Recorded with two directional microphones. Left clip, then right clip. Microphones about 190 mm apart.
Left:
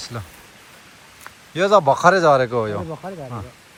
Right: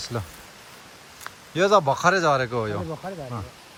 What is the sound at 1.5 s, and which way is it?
Speech, 15° right (ahead or behind).